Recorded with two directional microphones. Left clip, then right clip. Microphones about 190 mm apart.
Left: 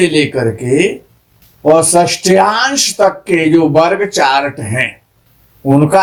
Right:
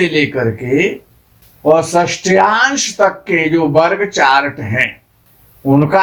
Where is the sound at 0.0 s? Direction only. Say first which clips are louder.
Left 2 dB; 35° left (ahead or behind).